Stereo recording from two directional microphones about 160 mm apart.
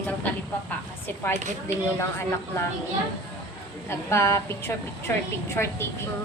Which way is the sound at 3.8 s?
15° left (ahead or behind).